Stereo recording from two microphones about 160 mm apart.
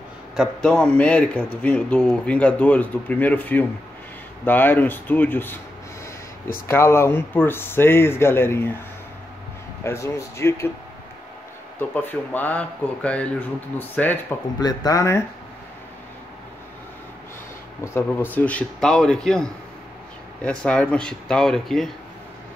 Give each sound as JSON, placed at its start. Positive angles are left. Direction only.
{"t": 0.4, "sound": "speech", "side_deg": 5}
{"t": 6.7, "sound": "speech", "side_deg": 15}
{"t": 9.8, "sound": "speech", "side_deg": 20}
{"t": 11.9, "sound": "speech", "side_deg": 10}
{"t": 14.6, "sound": "speech", "side_deg": 25}
{"t": 17.8, "sound": "speech", "side_deg": 15}